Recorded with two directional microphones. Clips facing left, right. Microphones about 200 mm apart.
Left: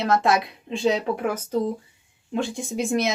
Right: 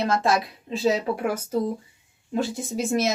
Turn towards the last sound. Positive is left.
turn(degrees=0)  # may be behind; listen again after turning